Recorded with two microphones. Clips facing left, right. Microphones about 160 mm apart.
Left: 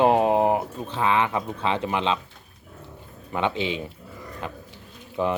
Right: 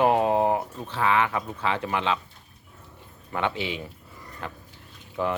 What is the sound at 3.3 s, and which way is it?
Speech, 20° left (ahead or behind).